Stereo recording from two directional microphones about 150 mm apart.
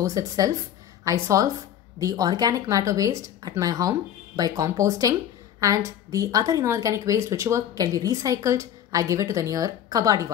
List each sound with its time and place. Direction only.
0.0 s a woman's voice: 25° right (ahead or behind)